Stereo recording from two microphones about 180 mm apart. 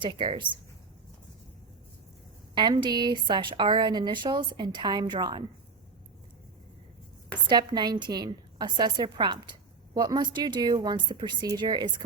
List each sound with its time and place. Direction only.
0.0 s a woman's voice: 25° right (ahead or behind)
2.6 s a woman's voice: 25° right (ahead or behind)
7.4 s a woman's voice: 25° right (ahead or behind)